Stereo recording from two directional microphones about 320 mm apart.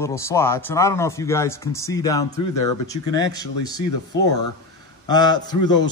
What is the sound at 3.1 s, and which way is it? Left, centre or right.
Speech, centre.